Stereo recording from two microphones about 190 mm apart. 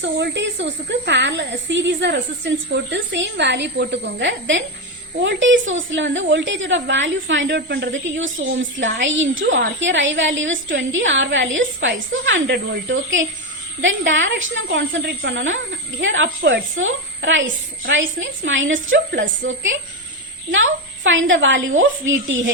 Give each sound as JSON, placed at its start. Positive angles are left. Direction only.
{"t": 0.0, "sound": "a woman's voice", "side_deg": -70}